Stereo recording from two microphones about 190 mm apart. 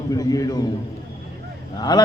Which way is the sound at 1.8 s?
20° left (ahead or behind).